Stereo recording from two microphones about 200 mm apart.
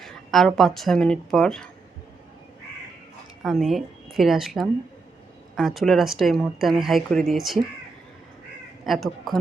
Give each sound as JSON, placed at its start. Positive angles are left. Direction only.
{"t": 0.0, "sound": "speech", "side_deg": 0}
{"t": 3.4, "sound": "a woman's voice", "side_deg": 0}
{"t": 8.9, "sound": "a woman's voice", "side_deg": 0}